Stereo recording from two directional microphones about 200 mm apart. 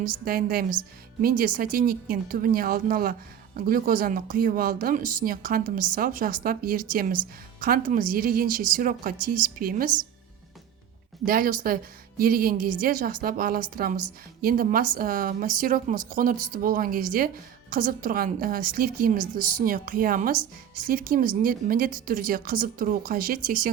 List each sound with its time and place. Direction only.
0.3 s speech: 45° right (ahead or behind)
11.3 s speech: 45° right (ahead or behind)